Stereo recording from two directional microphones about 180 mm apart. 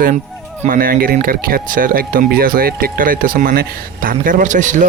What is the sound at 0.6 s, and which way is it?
Speech, 50° right (ahead or behind).